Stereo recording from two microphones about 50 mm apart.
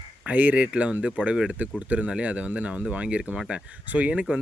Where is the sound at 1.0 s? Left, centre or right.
Right.